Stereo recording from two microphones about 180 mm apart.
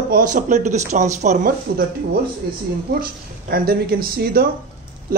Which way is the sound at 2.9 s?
55° right (ahead or behind).